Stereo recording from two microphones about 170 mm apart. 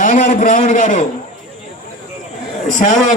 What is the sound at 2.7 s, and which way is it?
Speech, 45° left (ahead or behind).